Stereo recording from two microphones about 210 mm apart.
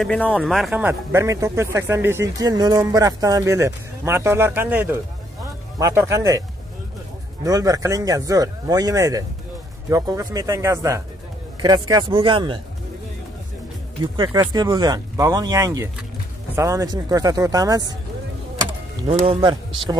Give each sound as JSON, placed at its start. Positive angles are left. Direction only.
{"t": 0.0, "sound": "speech", "side_deg": 5}
{"t": 7.4, "sound": "speech", "side_deg": -15}
{"t": 14.0, "sound": "speech", "side_deg": -20}